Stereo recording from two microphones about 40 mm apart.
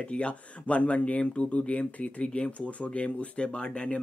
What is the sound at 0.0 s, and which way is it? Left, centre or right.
Speech, left.